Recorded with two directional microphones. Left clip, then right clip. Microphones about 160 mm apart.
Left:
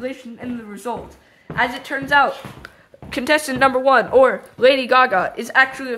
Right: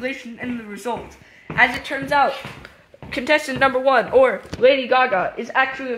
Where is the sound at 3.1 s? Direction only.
35° left (ahead or behind).